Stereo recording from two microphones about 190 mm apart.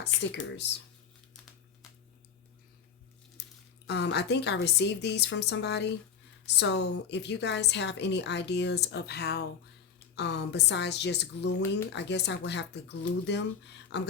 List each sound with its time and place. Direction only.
0.0 s a woman's voice: 65° left (ahead or behind)
3.8 s a woman's voice: 65° left (ahead or behind)
13.9 s a woman's voice: 65° left (ahead or behind)